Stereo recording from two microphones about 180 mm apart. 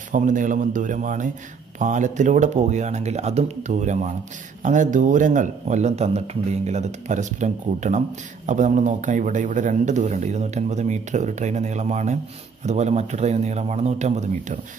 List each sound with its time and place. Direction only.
0.1 s a man's voice: 45° right (ahead or behind)